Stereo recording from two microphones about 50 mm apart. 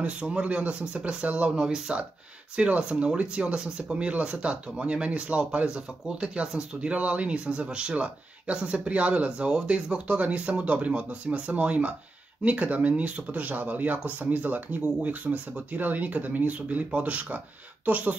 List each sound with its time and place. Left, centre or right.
0.0 s speech: right
1.5 s speech: centre
6.9 s speech: right